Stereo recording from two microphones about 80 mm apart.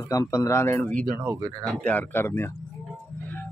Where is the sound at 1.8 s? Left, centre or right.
Left.